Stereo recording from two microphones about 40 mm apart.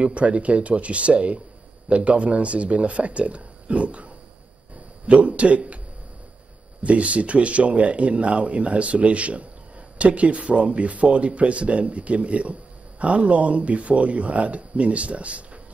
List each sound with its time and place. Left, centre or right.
0.0 s speech: right
6.8 s speech: right